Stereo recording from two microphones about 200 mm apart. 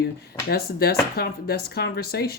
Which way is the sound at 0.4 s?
50° left (ahead or behind).